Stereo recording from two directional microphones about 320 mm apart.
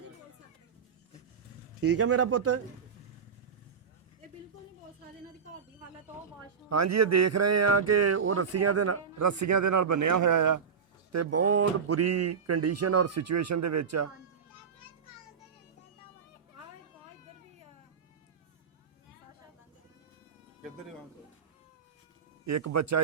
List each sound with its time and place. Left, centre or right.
1.8 s speech: right
6.7 s speech: right
11.1 s speech: right
22.4 s speech: right